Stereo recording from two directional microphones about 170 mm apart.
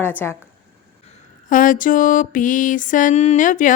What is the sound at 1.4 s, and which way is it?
Mantra, 50° left (ahead or behind).